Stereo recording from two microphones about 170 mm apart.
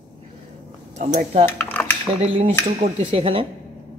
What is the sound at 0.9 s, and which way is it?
Speech, 40° right (ahead or behind).